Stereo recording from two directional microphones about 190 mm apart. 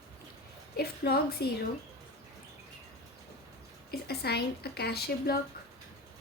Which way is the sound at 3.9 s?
55° left (ahead or behind).